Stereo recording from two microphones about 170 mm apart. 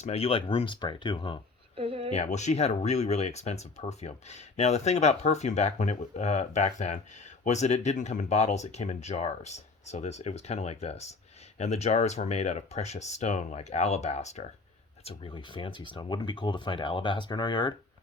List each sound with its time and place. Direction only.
0.0 s speech: 35° left (ahead or behind)
1.7 s a sound: 35° right (ahead or behind)
2.1 s speech: 45° left (ahead or behind); by 17.7 s 25° left (ahead or behind)